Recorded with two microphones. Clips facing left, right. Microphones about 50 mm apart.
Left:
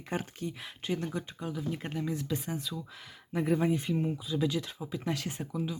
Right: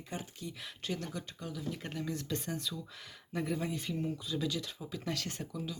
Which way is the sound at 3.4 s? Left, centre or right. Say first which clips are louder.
Left 9 dB; left.